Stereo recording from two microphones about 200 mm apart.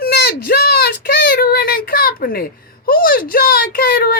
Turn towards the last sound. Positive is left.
turn(degrees=50)  # may be behind; listen again after turning